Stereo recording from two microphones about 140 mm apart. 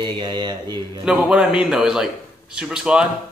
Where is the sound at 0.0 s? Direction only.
35° right (ahead or behind).